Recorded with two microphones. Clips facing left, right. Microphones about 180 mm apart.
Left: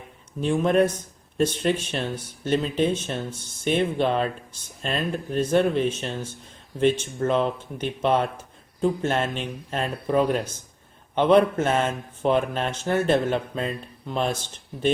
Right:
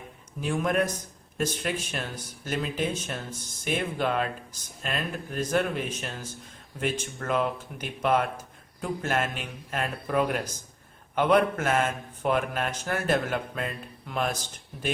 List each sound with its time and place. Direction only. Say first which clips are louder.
0.4 s speech: left 6 dB; 30° left (ahead or behind)
1.9 s speech: left 6 dB; 30° left (ahead or behind)